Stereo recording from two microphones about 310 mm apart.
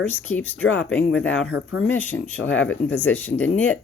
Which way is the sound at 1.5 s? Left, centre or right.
Left.